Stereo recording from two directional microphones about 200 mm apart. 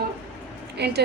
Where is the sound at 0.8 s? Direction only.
55° right (ahead or behind).